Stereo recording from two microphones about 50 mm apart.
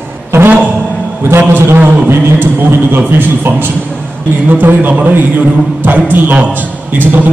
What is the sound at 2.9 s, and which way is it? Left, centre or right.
Speech, right.